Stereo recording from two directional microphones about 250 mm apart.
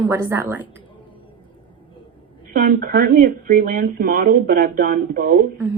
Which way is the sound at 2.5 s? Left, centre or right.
Right.